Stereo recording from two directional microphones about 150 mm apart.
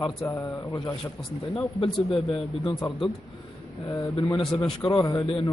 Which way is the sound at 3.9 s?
20° left (ahead or behind).